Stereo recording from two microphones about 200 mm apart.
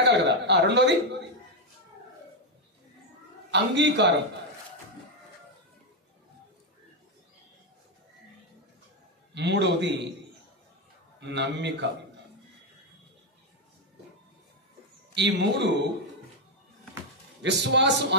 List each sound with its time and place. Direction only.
0.0 s a man's voice: 60° right (ahead or behind)
3.5 s a man's voice: 60° right (ahead or behind)
9.3 s a man's voice: 60° right (ahead or behind)
11.1 s a man's voice: 60° right (ahead or behind)
15.1 s a man's voice: 60° right (ahead or behind)
17.4 s a man's voice: 60° right (ahead or behind)